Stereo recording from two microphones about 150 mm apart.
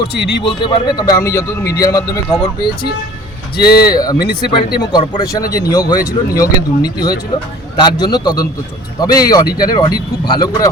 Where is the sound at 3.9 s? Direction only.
25° left (ahead or behind).